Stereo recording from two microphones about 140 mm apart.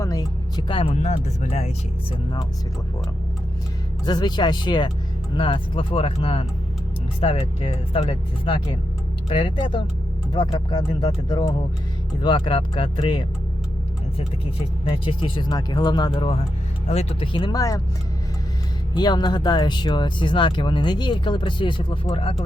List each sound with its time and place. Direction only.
0.0 s music: 25° left (ahead or behind)
0.8 s speech: 50° left (ahead or behind)
4.0 s speech: 30° left (ahead or behind)
14.8 s speech: 40° left (ahead or behind)
18.9 s speech: 30° left (ahead or behind)